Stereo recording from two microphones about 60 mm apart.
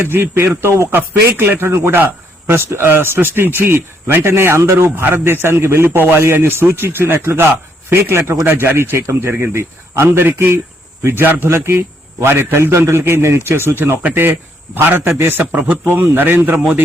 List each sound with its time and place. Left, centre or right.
0.1 s speech: right
0.9 s a man's voice: right
10.1 s a man's voice: right
15.5 s speech: right
15.9 s a man's voice: right